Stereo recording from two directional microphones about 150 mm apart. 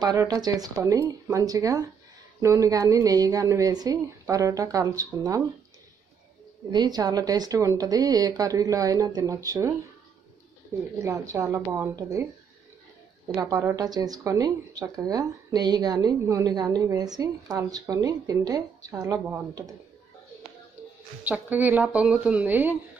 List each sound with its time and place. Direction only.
0.0 s speech: 25° right (ahead or behind)
6.7 s speech: 25° right (ahead or behind)
11.0 s speech: 20° right (ahead or behind)
13.3 s speech: 20° right (ahead or behind)
21.2 s speech: 10° right (ahead or behind)